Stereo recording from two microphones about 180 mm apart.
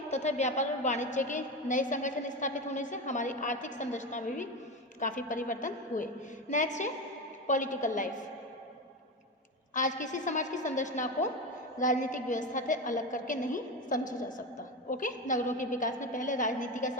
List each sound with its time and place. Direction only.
0.1 s a woman's voice: 40° left (ahead or behind)
9.7 s a woman's voice: 45° left (ahead or behind)